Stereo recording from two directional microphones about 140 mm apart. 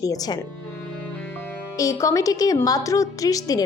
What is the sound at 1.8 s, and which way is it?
A woman's voice, 25° left (ahead or behind).